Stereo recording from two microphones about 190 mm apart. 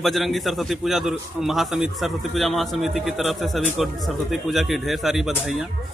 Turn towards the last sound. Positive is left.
turn(degrees=0)  # may be behind; listen again after turning